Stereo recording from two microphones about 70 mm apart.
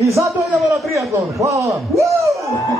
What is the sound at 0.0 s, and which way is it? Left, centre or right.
A man's voice, right.